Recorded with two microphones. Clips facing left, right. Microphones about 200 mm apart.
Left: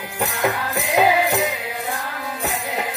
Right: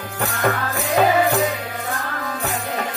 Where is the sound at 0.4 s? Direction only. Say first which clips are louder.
Right 2 dB; 15° left (ahead or behind).